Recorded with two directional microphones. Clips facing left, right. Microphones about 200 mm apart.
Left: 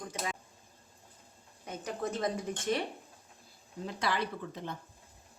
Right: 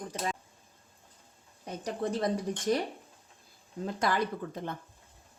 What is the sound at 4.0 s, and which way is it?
Speech, 45° right (ahead or behind).